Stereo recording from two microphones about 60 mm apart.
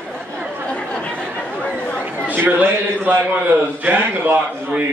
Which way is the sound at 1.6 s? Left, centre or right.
Left.